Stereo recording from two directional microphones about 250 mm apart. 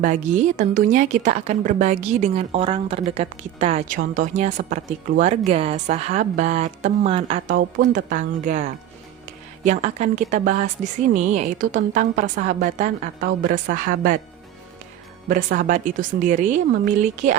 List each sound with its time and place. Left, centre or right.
0.0 s a woman's voice: right
15.5 s a woman's voice: right